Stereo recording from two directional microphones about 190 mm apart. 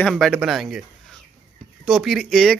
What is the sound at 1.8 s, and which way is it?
Speech, centre (ahead or behind).